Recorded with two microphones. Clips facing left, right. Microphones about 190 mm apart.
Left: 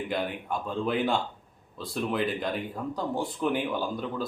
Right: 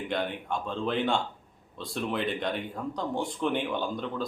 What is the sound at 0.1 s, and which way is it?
Speech, 5° left (ahead or behind).